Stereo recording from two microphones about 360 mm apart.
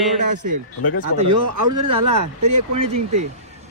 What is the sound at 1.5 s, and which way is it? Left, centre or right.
Speech, right.